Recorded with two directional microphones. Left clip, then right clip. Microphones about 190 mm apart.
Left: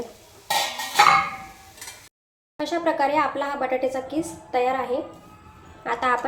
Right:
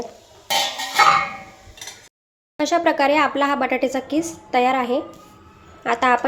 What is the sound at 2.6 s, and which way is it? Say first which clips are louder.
A woman's voice: right 5 dB; 40° right (ahead or behind).